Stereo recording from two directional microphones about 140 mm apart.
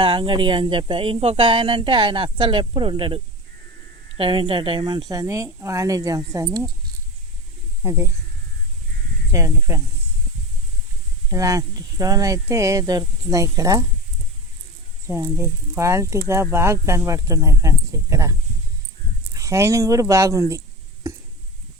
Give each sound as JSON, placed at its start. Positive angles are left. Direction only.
{"t": 0.0, "sound": "speech", "side_deg": -40}
{"t": 4.2, "sound": "speech", "side_deg": -35}
{"t": 7.8, "sound": "speech", "side_deg": -20}
{"t": 9.3, "sound": "speech", "side_deg": -20}
{"t": 11.3, "sound": "speech", "side_deg": -25}
{"t": 15.0, "sound": "speech", "side_deg": -20}